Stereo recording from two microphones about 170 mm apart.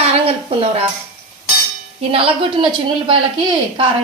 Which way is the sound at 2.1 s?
35° right (ahead or behind).